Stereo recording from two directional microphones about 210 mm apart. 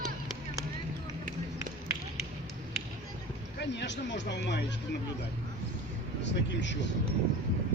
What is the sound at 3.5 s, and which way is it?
Speech, 55° left (ahead or behind).